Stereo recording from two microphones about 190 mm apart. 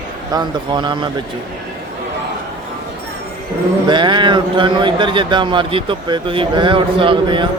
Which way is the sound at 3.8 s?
25° right (ahead or behind).